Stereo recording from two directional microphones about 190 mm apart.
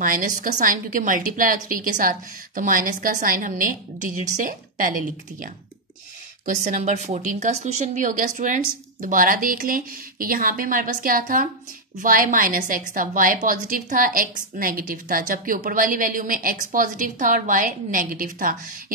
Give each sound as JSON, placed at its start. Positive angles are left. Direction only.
{"t": 0.0, "sound": "a woman's voice", "side_deg": -45}